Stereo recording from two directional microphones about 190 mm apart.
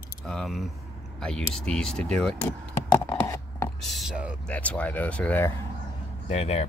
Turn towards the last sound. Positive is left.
turn(degrees=35)  # may be behind; listen again after turning